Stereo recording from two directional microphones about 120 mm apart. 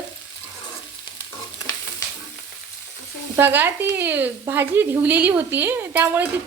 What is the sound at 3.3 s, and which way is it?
Speech, 15° right (ahead or behind).